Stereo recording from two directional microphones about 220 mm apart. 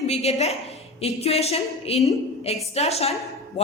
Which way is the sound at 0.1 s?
30° left (ahead or behind).